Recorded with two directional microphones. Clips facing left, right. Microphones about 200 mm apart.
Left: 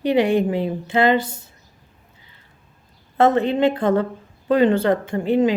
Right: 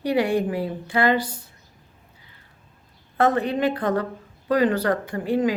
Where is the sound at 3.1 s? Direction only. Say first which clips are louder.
Left 4 dB; 25° left (ahead or behind).